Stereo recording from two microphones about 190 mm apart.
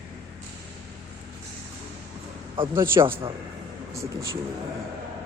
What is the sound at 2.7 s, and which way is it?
Speech, 10° right (ahead or behind).